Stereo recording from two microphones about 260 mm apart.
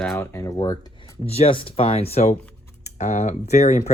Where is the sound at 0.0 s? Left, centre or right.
Centre.